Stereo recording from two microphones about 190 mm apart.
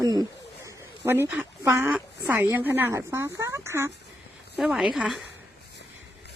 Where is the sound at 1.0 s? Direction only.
10° right (ahead or behind).